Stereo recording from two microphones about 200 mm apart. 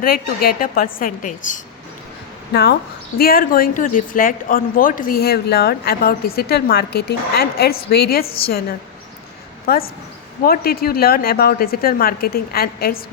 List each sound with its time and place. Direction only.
0.0 s speech: 45° left (ahead or behind)
2.5 s speech: 55° left (ahead or behind)
9.6 s speech: 50° left (ahead or behind)